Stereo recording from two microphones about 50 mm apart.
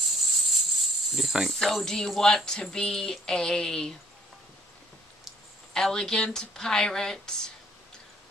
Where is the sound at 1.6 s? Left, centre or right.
Centre.